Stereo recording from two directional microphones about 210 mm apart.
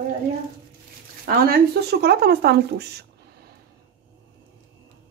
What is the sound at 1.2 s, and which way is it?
A woman's voice, 45° right (ahead or behind).